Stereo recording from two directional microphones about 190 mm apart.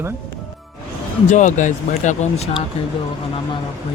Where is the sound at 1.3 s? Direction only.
40° left (ahead or behind).